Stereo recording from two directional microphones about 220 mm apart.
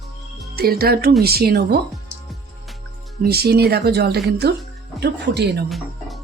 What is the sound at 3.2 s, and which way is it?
Speech, 45° right (ahead or behind).